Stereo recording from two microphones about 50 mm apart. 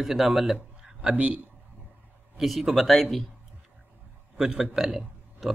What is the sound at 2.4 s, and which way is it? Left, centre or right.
Speech, centre.